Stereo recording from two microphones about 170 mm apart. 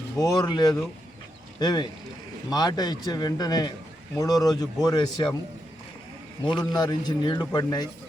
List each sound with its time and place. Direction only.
0.2 s a man's voice: 25° left (ahead or behind)
6.4 s a man's voice: 25° left (ahead or behind)